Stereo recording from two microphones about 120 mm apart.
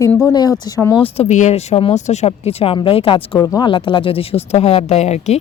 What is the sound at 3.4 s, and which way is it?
Speech, 30° left (ahead or behind).